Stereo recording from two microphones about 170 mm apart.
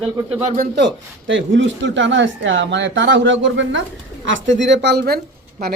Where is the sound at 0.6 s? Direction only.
85° right.